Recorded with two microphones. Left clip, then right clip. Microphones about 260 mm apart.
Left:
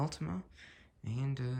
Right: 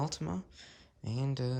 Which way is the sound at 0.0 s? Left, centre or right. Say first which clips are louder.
Right 2 dB; centre.